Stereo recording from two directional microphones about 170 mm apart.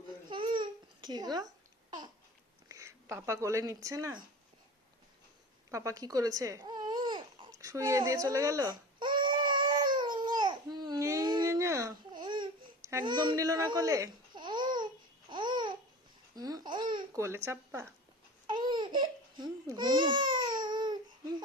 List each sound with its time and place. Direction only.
0.3 s babbling: 30° right (ahead or behind)
2.6 s speech: 15° right (ahead or behind)
5.7 s babbling: 20° right (ahead or behind)
12.9 s speech: 20° right (ahead or behind)
15.3 s babbling: 25° right (ahead or behind)
17.2 s speech: 15° right (ahead or behind)
18.4 s babbling: 25° right (ahead or behind)